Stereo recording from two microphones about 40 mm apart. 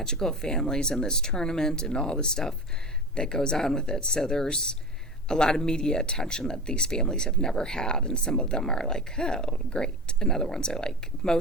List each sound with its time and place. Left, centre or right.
0.0 s speech: centre